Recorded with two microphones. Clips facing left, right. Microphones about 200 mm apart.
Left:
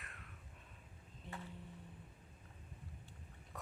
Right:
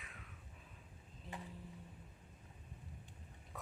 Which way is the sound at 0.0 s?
Centre (ahead or behind).